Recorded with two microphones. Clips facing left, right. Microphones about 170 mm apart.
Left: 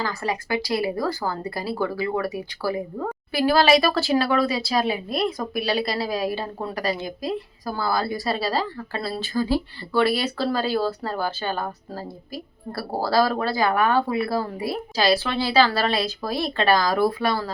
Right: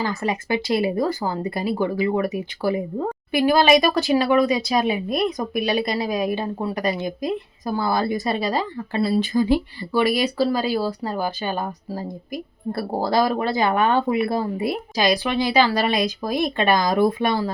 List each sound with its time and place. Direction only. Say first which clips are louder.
0.0 s speech: right 3 dB; 20° right (ahead or behind)